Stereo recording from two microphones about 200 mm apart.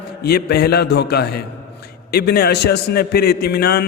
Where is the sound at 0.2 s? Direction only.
50° left (ahead or behind).